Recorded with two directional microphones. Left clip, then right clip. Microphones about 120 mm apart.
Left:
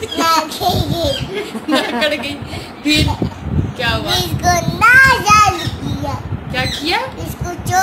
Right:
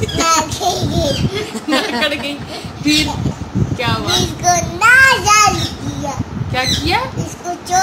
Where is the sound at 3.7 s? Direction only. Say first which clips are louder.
Left 1 dB; 50° right (ahead or behind).